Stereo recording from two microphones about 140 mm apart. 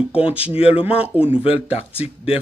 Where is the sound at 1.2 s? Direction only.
45° left (ahead or behind).